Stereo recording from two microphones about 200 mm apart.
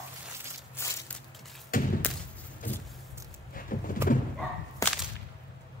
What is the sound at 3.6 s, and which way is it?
Vehicle, 45° left (ahead or behind).